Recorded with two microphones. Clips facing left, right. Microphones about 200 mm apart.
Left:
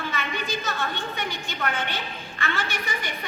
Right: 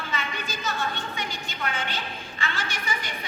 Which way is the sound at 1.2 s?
60° left (ahead or behind).